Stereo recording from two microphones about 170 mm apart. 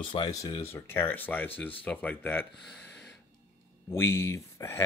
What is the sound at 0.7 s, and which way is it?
Speech, 15° left (ahead or behind).